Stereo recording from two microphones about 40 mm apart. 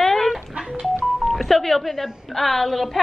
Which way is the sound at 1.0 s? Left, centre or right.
Centre.